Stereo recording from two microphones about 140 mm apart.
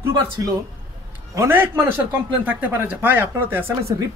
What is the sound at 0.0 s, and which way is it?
A man's voice, 25° right (ahead or behind).